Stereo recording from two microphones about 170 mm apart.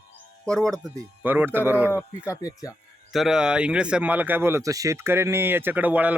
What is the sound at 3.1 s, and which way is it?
Speech, centre (ahead or behind).